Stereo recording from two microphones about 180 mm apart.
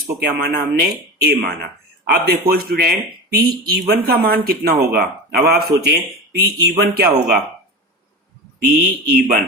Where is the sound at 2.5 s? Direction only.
60° right (ahead or behind).